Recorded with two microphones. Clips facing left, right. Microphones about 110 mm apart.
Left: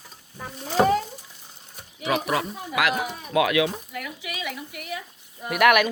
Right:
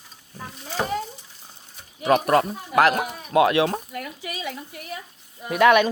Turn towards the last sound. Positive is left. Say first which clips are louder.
# right 2 dB
turn(degrees=-25)  # may be behind; listen again after turning